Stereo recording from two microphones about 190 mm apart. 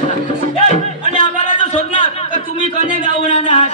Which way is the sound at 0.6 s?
35° left (ahead or behind).